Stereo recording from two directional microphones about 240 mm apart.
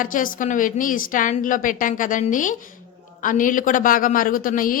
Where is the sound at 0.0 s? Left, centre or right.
Left.